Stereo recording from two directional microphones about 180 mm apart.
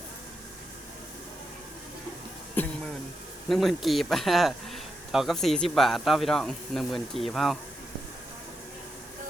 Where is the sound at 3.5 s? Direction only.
Centre (ahead or behind).